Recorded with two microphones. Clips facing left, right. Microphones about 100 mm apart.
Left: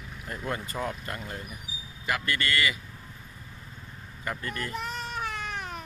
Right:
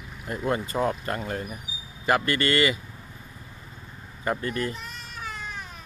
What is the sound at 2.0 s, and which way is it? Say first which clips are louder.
Speech: right 7 dB; 35° right (ahead or behind).